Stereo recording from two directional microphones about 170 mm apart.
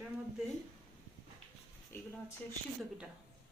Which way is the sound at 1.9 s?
15° left (ahead or behind).